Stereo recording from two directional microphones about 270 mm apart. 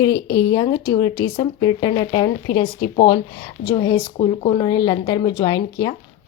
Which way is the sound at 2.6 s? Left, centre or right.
Left.